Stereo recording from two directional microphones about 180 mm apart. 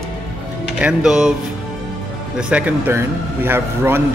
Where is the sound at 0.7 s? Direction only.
5° right (ahead or behind).